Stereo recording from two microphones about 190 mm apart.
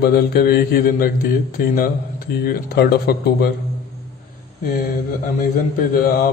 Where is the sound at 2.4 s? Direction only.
55° left (ahead or behind).